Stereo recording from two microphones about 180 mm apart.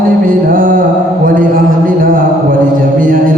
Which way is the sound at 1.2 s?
50° right (ahead or behind).